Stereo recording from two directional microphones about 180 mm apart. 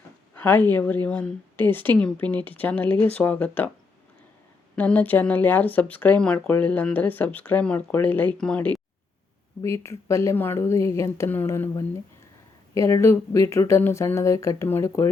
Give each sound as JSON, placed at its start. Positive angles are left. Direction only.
{"t": 0.3, "sound": "a sound", "side_deg": 10}
{"t": 0.7, "sound": "speech", "side_deg": 10}
{"t": 4.7, "sound": "speech", "side_deg": 10}